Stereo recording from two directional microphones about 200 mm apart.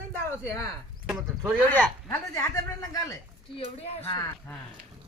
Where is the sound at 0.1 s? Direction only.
10° left (ahead or behind).